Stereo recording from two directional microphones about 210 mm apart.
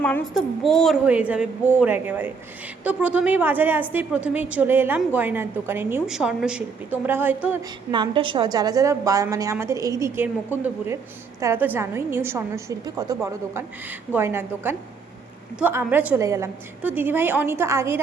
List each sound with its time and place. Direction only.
0.0 s a woman's voice: 5° left (ahead or behind)
7.9 s a woman's voice: 20° right (ahead or behind)